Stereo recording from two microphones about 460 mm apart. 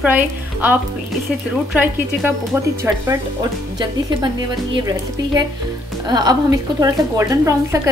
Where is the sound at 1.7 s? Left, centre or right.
Centre.